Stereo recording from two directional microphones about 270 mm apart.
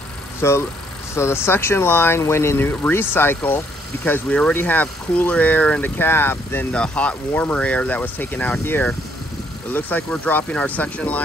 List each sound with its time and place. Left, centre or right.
0.4 s speech: centre